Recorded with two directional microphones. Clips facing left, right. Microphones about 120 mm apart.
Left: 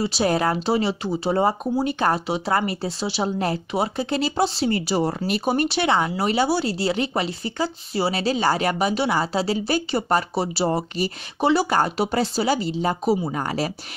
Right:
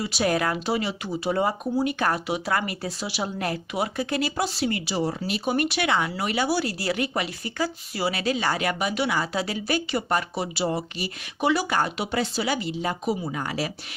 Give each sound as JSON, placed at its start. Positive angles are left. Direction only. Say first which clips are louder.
{"t": 0.0, "sound": "speech", "louder": "left 3 dB", "side_deg": 30}
{"t": 5.5, "sound": "speech", "louder": "left 3 dB", "side_deg": 30}